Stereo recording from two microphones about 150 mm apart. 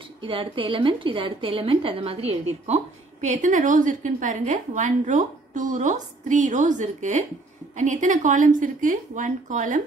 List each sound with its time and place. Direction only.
0.2 s a woman's voice: 35° right (ahead or behind)
2.6 s a woman's voice: 50° right (ahead or behind)